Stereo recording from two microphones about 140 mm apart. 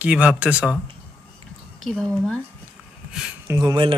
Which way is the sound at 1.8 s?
5° left (ahead or behind).